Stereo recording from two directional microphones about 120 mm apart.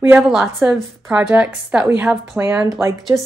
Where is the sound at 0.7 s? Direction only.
5° right (ahead or behind); by 3.2 s 25° right (ahead or behind).